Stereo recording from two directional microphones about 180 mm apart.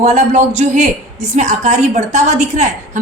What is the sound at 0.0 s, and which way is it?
A man's voice, 40° right (ahead or behind).